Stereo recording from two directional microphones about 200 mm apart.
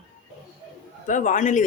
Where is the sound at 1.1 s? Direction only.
40° left (ahead or behind).